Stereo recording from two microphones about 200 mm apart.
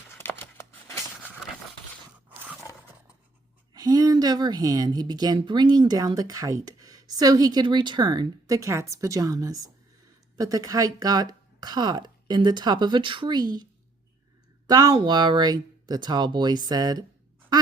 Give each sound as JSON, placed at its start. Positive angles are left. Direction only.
{"t": 0.1, "sound": "a sound", "side_deg": 10}
{"t": 3.8, "sound": "speech", "side_deg": -20}
{"t": 14.7, "sound": "speech", "side_deg": -20}